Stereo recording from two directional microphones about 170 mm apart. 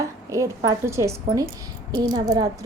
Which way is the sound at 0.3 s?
20° right (ahead or behind).